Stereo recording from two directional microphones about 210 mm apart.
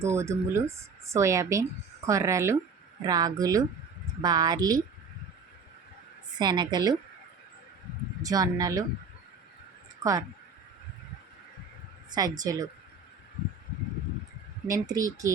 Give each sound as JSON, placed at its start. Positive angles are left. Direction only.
{"t": 0.0, "sound": "speech", "side_deg": -10}
{"t": 6.4, "sound": "a woman's voice", "side_deg": -20}
{"t": 8.3, "sound": "speech", "side_deg": -15}
{"t": 10.0, "sound": "speech", "side_deg": -15}
{"t": 12.1, "sound": "speech", "side_deg": -20}
{"t": 14.7, "sound": "speech", "side_deg": -15}